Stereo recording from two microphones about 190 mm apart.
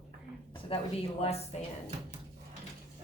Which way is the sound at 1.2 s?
35° left (ahead or behind).